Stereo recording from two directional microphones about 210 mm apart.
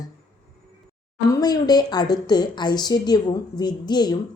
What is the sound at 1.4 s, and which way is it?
A woman's voice, 20° left (ahead or behind).